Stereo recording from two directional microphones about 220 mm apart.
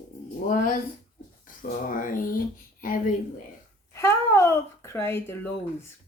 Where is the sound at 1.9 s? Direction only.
40° left (ahead or behind).